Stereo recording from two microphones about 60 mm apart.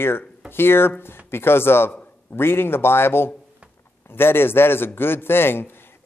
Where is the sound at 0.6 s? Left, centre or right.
Left.